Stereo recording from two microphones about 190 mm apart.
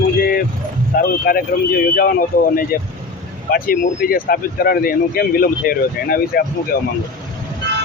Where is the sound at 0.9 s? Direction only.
50° left (ahead or behind).